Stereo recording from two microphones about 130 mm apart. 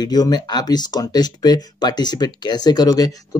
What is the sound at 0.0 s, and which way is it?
Speech, 30° left (ahead or behind).